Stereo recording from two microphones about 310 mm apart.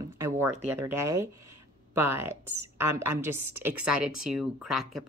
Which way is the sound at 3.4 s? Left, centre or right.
Right.